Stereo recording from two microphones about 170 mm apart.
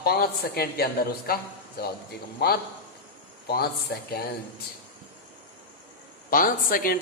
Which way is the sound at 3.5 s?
65° left (ahead or behind).